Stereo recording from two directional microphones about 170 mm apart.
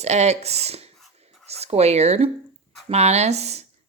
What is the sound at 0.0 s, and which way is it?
Speech, 40° right (ahead or behind).